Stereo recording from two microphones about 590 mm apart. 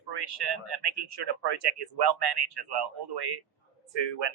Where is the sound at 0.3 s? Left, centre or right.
Right.